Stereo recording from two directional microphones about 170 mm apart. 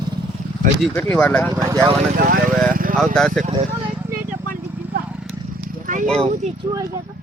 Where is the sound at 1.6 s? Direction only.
20° right (ahead or behind).